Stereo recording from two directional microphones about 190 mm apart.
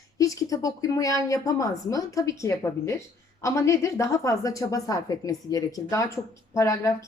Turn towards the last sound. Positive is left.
turn(degrees=15)  # may be behind; listen again after turning